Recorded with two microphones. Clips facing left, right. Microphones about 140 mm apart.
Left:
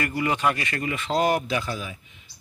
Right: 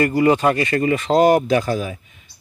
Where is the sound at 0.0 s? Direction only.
35° right (ahead or behind).